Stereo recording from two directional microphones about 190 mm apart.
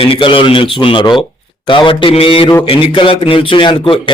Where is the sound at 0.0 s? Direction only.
25° left (ahead or behind).